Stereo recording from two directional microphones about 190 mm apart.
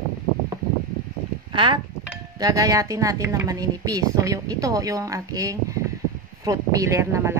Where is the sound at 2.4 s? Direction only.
20° right (ahead or behind).